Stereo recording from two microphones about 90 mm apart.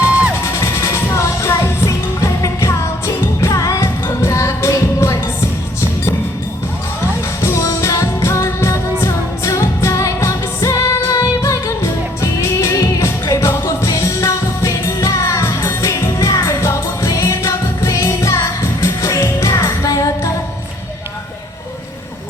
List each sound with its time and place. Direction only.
0.0 s music: 15° right (ahead or behind)
0.4 s music: 30° left (ahead or behind)
7.4 s music: 35° left (ahead or behind)